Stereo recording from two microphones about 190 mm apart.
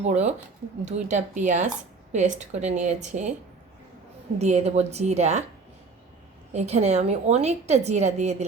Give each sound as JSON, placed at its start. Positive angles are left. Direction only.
{"t": 0.0, "sound": "a woman's voice", "side_deg": -35}
{"t": 4.4, "sound": "a woman's voice", "side_deg": -35}
{"t": 6.5, "sound": "a woman's voice", "side_deg": -35}